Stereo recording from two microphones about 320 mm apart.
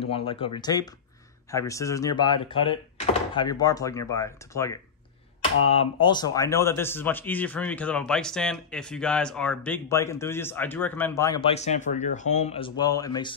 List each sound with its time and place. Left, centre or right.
0.0 s a man's voice: centre